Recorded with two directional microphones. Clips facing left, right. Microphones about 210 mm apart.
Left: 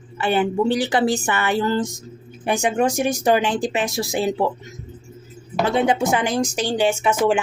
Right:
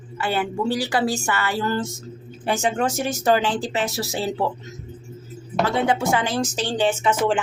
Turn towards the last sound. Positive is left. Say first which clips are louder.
# left 2 dB
turn(degrees=10)  # may be behind; listen again after turning